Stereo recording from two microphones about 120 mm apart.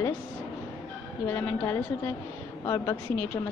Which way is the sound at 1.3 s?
20° left (ahead or behind).